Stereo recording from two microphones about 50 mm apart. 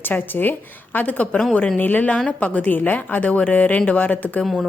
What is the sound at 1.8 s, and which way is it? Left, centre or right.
Speech, left.